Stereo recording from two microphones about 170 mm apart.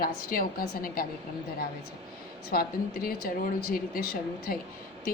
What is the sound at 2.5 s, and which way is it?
A woman's voice, 60° left (ahead or behind).